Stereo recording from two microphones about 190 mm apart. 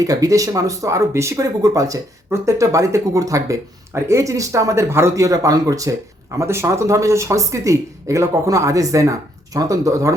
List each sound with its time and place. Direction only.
0.0 s speech: 20° right (ahead or behind)